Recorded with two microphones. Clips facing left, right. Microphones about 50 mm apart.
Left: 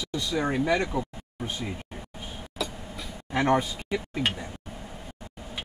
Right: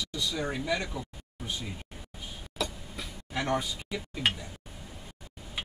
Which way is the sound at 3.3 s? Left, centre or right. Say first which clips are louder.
Left 7 dB; left.